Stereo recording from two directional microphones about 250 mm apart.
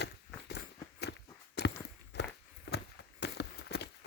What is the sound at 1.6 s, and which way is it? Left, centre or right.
Walk, left.